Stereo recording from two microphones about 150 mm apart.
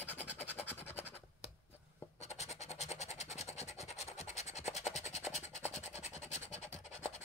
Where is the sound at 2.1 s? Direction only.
45° left (ahead or behind).